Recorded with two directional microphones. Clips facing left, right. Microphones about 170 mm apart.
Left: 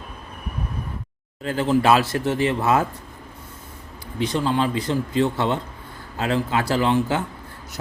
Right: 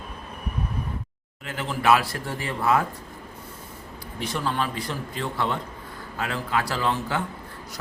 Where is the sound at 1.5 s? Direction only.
30° left (ahead or behind).